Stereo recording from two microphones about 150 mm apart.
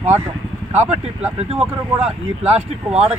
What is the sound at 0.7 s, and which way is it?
Speech, 45° right (ahead or behind).